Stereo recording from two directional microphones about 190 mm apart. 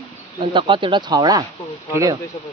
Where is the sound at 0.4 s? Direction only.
25° right (ahead or behind).